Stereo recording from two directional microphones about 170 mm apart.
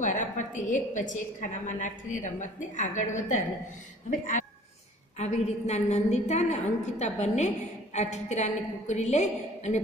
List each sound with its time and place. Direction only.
0.0 s a woman's voice: 50° left (ahead or behind)